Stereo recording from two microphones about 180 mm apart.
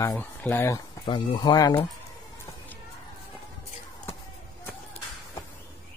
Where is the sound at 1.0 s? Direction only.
30° left (ahead or behind).